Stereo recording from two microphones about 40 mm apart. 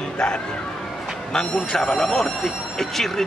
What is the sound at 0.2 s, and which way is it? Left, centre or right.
Speech, left.